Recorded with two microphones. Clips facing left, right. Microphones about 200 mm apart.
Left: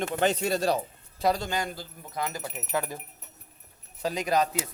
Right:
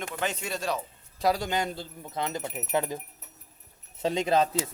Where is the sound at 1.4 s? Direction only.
20° right (ahead or behind).